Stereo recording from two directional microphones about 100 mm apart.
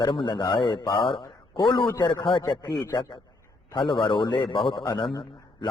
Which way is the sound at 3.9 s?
55° left (ahead or behind).